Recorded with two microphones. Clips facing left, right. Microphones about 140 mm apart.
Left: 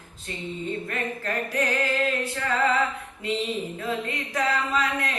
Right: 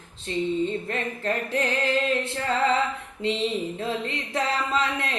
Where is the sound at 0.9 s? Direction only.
30° right (ahead or behind).